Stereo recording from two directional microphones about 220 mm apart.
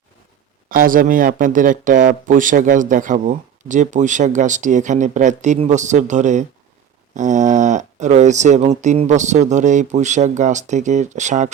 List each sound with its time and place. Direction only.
0.7 s speech: 40° right (ahead or behind)